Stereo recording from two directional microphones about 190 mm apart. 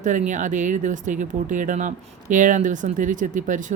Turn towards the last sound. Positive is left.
turn(degrees=-40)  # may be behind; listen again after turning